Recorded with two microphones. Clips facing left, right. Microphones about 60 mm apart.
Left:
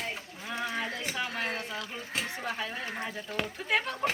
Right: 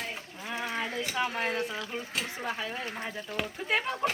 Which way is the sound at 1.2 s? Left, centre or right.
Right.